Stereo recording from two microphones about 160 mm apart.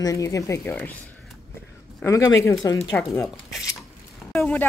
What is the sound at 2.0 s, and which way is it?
A woman's voice, 15° left (ahead or behind).